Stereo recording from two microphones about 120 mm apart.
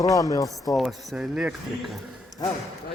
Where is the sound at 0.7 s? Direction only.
Centre (ahead or behind).